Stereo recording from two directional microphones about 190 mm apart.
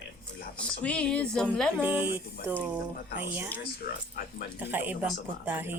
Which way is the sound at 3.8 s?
50° left (ahead or behind).